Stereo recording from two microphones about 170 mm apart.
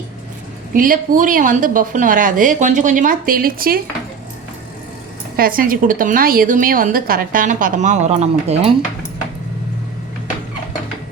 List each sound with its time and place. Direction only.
0.7 s a woman's voice: 55° right (ahead or behind)
5.4 s a woman's voice: 55° right (ahead or behind); by 8.7 s 40° right (ahead or behind)